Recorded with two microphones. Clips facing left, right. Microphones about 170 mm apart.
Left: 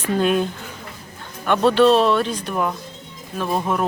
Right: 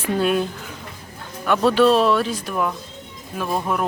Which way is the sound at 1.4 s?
5° right (ahead or behind).